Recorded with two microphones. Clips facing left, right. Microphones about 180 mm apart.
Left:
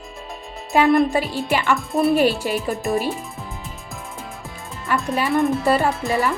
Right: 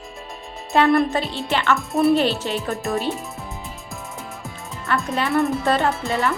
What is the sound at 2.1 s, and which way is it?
Speech, 10° left (ahead or behind).